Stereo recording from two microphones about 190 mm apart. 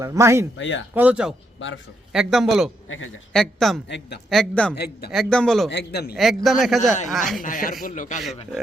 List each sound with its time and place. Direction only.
0.0 s speech: 15° right (ahead or behind)
0.5 s a man's voice: 75° left (ahead or behind)
0.9 s speech: 5° right (ahead or behind)
1.5 s a man's voice: 80° left
2.1 s a man's voice: centre (ahead or behind)
3.8 s a man's voice: 65° left (ahead or behind)
4.3 s a man's voice: 5° left (ahead or behind)
4.7 s speech: 55° left (ahead or behind)
5.1 s a man's voice: 5° left (ahead or behind)
5.7 s speech: 60° left (ahead or behind)
6.1 s a man's voice: centre (ahead or behind)
7.4 s speech: 45° left (ahead or behind)